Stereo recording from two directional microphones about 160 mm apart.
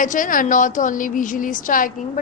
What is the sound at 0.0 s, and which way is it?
A woman's voice, 55° left (ahead or behind).